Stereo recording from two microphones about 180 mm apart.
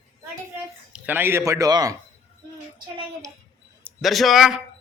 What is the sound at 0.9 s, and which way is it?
A man's voice, 10° right (ahead or behind).